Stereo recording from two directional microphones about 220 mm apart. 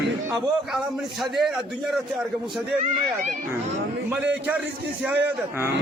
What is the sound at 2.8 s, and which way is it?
Speech, 35° right (ahead or behind).